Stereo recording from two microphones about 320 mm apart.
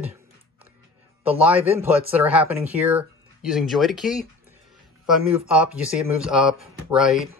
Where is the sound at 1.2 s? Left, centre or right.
Centre.